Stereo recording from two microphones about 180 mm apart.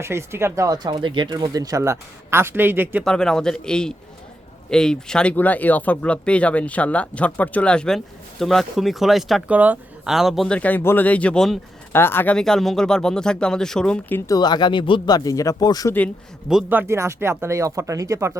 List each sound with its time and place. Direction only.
0.0 s speech: 15° right (ahead or behind)
3.0 s speech: 5° left (ahead or behind)
11.9 s speech: 15° left (ahead or behind)
16.5 s speech: 5° right (ahead or behind)